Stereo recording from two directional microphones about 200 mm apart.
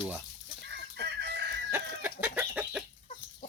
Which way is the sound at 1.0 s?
55° right (ahead or behind).